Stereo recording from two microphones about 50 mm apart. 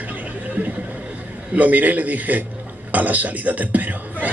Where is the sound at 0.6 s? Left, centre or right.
Right.